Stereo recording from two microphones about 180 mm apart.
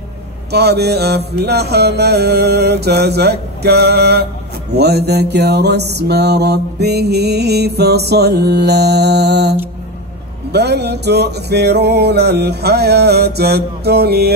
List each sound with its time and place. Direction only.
0.5 s mantra: 65° right (ahead or behind)